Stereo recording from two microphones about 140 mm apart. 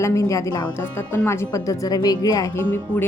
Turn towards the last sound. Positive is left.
turn(degrees=15)  # may be behind; listen again after turning